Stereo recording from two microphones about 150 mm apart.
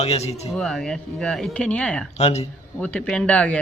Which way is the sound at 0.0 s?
45° left (ahead or behind).